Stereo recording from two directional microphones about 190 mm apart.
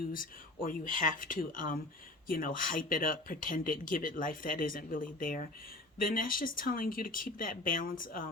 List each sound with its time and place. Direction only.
0.1 s speech: 45° left (ahead or behind)